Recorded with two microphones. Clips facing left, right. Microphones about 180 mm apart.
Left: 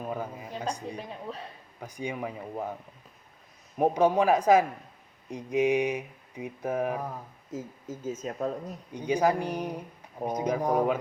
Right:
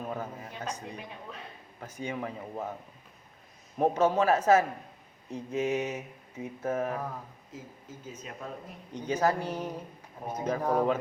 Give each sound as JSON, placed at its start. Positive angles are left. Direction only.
{"t": 0.0, "sound": "mantra", "side_deg": 10}
{"t": 1.8, "sound": "mantra", "side_deg": 15}
{"t": 3.8, "sound": "mantra", "side_deg": 15}
{"t": 7.5, "sound": "speech", "side_deg": 45}
{"t": 8.9, "sound": "mantra", "side_deg": 10}